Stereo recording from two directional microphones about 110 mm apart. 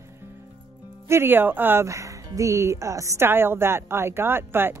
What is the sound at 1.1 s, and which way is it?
A man's voice, 20° right (ahead or behind).